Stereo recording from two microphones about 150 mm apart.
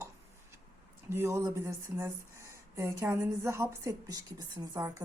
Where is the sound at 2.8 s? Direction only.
20° right (ahead or behind).